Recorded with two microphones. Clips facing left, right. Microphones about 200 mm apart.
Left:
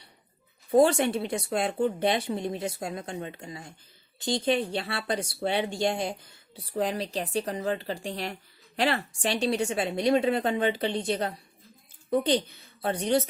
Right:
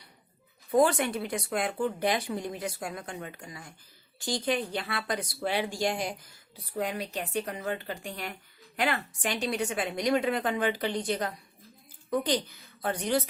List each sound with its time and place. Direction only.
0.7 s speech: 25° left (ahead or behind)